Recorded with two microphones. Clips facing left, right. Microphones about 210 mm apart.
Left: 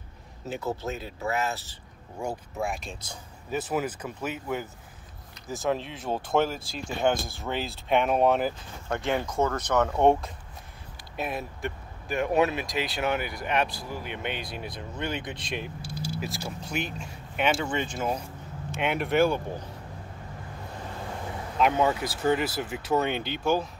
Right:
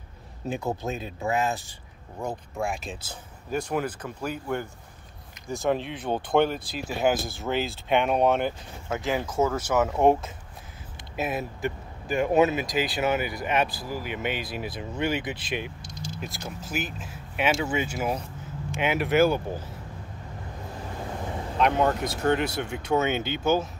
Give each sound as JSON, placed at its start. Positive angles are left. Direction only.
{"t": 0.5, "sound": "a man's voice", "side_deg": -15}
{"t": 2.1, "sound": "speech", "side_deg": 5}
{"t": 3.6, "sound": "speech", "side_deg": 5}
{"t": 15.8, "sound": "speech", "side_deg": 10}
{"t": 21.5, "sound": "speech", "side_deg": 5}